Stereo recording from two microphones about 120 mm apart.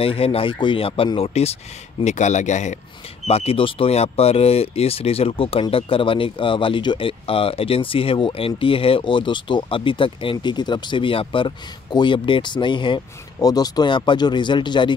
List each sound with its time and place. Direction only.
0.0 s speech: 55° left (ahead or behind); by 2.8 s 80° left
3.3 s speech: 55° left (ahead or behind); by 15.0 s 40° left (ahead or behind)